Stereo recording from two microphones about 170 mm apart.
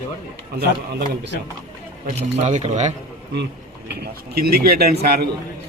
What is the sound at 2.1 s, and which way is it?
Speech, 45° right (ahead or behind).